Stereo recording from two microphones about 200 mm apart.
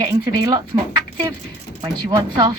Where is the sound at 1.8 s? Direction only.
20° right (ahead or behind).